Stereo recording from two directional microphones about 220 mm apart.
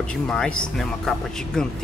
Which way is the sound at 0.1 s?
5° left (ahead or behind).